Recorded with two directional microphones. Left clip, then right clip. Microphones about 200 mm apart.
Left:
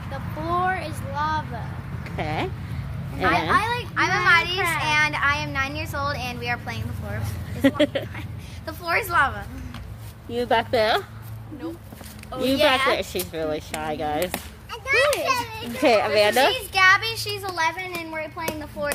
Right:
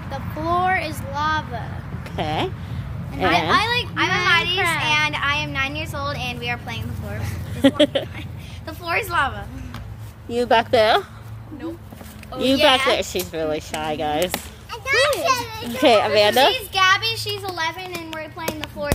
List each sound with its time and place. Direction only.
0.1 s a sound: 20° right (ahead or behind)
3.2 s a woman's voice: 10° left (ahead or behind)
3.4 s a woman's voice: 20° right (ahead or behind)
3.9 s a sound: 10° left (ahead or behind)
7.6 s speech: 10° right (ahead or behind)
8.6 s a woman's voice: 5° left (ahead or behind)
10.3 s speech: 20° right (ahead or behind)
12.3 s speech: centre (ahead or behind)
12.9 s a child's voice: 10° right (ahead or behind); by 15.8 s 30° right (ahead or behind)
15.8 s speech: 15° right (ahead or behind)
16.5 s a child's voice: 15° left (ahead or behind)